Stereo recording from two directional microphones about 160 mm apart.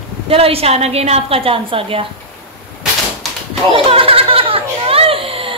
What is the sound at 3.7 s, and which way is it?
Children playing, 35° right (ahead or behind).